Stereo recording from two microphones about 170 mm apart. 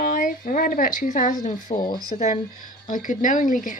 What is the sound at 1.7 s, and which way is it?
Speech, 35° left (ahead or behind).